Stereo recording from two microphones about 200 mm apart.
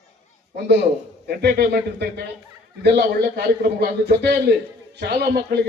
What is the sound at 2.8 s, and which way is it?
A man's voice, 55° right (ahead or behind).